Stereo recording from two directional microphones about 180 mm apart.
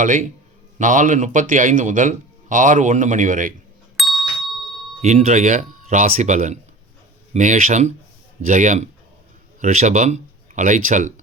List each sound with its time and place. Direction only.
0.0 s speech: 45° right (ahead or behind)
3.9 s doorbell: centre (ahead or behind)
5.0 s speech: 35° right (ahead or behind)